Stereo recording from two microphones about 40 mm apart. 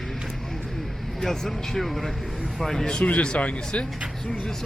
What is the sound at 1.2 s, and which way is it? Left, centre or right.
Speech, centre.